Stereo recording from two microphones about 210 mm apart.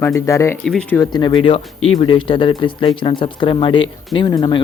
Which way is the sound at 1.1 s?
20° left (ahead or behind).